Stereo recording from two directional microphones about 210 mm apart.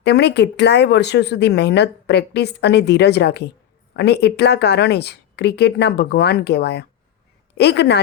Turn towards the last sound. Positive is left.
turn(degrees=55)  # may be behind; listen again after turning